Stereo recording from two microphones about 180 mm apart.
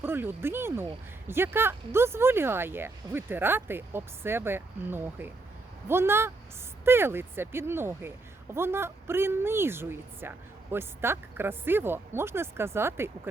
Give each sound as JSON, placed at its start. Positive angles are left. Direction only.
{"t": 0.0, "sound": "a woman's voice", "side_deg": -10}